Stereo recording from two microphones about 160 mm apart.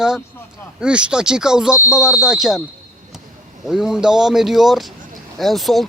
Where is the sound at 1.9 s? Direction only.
5° right (ahead or behind).